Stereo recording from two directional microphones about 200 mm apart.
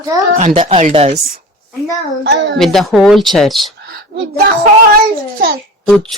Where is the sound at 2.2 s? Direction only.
60° right (ahead or behind).